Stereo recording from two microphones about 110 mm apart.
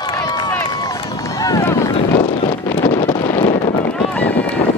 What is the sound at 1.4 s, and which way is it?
Boat, 35° left (ahead or behind).